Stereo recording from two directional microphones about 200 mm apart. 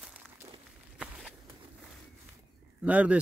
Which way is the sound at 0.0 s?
10° right (ahead or behind).